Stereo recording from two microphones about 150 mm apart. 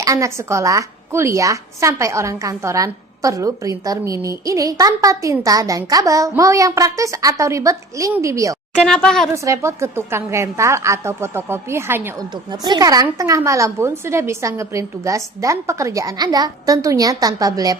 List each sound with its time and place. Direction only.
0.0 s a woman's voice: 20° right (ahead or behind)
8.8 s speech: 5° left (ahead or behind)
9.3 s a woman's voice: 20° right (ahead or behind)
12.3 s a woman's voice: 30° right (ahead or behind)